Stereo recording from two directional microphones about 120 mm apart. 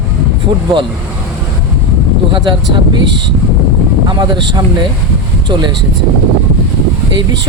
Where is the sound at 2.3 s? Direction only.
40° right (ahead or behind).